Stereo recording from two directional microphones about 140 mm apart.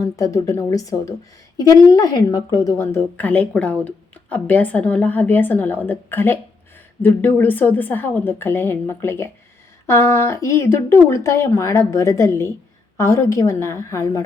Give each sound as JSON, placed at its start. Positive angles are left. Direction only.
{"t": 0.0, "sound": "a woman's voice", "side_deg": 25}